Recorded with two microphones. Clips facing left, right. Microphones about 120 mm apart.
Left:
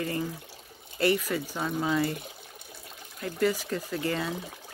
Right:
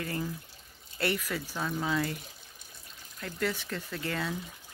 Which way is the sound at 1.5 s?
15° left (ahead or behind).